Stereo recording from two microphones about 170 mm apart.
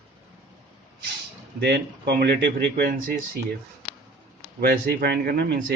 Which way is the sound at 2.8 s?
55° right (ahead or behind).